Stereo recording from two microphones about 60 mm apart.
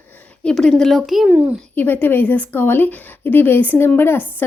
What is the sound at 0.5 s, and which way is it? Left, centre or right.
Speech, centre.